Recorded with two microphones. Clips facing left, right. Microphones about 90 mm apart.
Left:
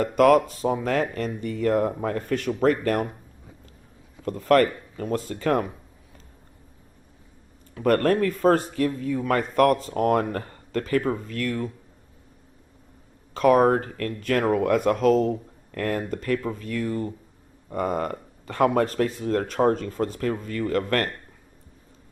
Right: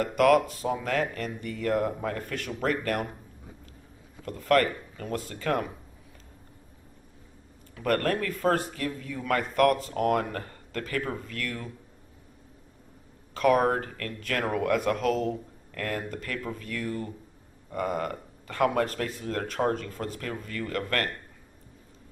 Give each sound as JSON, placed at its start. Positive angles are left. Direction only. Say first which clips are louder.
{"t": 0.2, "sound": "a man's voice", "louder": "left 4 dB", "side_deg": 35}
{"t": 4.3, "sound": "a man's voice", "louder": "left 4 dB", "side_deg": 35}
{"t": 7.8, "sound": "a man's voice", "louder": "left 6 dB", "side_deg": 35}
{"t": 13.3, "sound": "a man's voice", "louder": "left 5 dB", "side_deg": 30}